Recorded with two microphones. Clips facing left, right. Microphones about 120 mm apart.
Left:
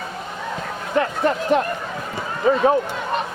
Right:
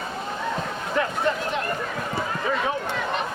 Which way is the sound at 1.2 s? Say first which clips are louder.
Left 5 dB; 45° left (ahead or behind).